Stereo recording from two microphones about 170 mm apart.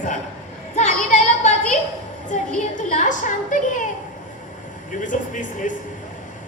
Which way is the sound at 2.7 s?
45° left (ahead or behind).